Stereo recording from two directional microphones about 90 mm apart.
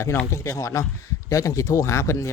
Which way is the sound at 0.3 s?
35° left (ahead or behind).